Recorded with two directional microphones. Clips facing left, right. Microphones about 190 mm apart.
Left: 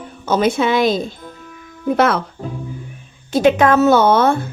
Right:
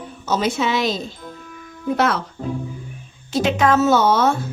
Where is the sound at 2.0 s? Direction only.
55° left (ahead or behind).